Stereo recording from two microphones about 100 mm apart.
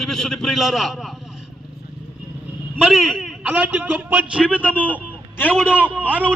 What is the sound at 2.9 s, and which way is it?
Speech, centre (ahead or behind).